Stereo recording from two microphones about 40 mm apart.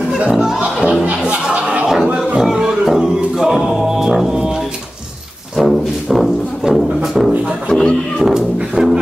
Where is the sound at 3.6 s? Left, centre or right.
Centre.